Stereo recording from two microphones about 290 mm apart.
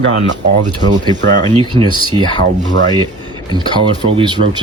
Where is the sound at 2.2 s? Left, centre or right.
Centre.